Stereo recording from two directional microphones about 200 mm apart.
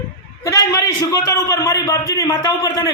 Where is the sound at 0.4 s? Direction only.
15° left (ahead or behind).